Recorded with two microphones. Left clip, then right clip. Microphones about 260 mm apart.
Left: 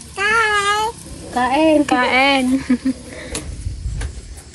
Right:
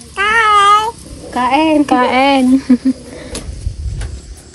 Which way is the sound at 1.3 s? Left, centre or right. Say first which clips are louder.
Right 3 dB; centre.